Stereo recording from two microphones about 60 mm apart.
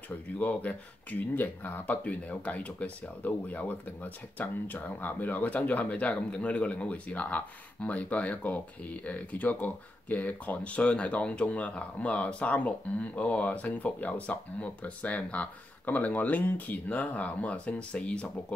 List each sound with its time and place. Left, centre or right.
0.4 s speech: left